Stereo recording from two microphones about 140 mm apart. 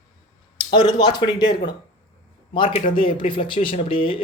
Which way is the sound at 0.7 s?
30° left (ahead or behind).